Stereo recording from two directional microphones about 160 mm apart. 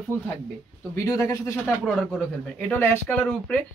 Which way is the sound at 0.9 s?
20° left (ahead or behind).